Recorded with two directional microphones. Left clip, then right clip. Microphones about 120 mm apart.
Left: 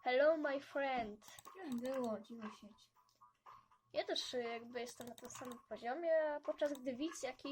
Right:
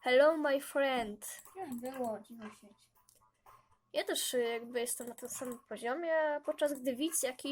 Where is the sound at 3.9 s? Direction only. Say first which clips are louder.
Right 6 dB; 45° right (ahead or behind).